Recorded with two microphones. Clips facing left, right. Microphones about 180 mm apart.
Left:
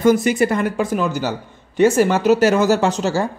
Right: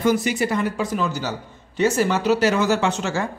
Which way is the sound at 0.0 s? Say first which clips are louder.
Left 5 dB; 50° left (ahead or behind).